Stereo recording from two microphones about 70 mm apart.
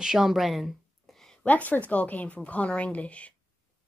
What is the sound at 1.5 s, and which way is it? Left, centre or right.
Speech, left.